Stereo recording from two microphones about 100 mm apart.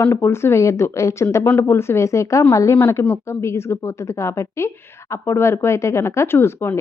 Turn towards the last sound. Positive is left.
turn(degrees=25)  # may be behind; listen again after turning